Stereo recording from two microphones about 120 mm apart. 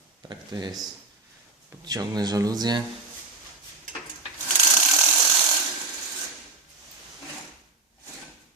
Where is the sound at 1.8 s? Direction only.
35° right (ahead or behind).